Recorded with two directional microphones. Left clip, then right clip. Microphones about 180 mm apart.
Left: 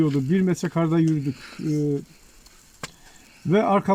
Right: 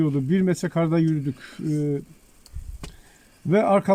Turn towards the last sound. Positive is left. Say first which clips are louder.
# right 1 dB
turn(degrees=-30)  # may be behind; listen again after turning